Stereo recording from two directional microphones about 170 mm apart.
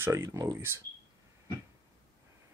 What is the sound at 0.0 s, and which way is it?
Speech, 15° right (ahead or behind).